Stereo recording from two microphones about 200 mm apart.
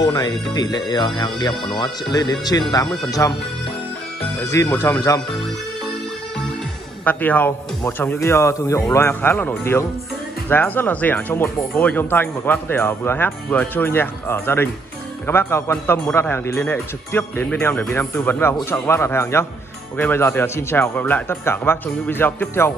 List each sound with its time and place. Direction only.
0.0 s speech: 20° left (ahead or behind)
4.4 s speech: 15° left (ahead or behind)
7.1 s speech: 10° left (ahead or behind)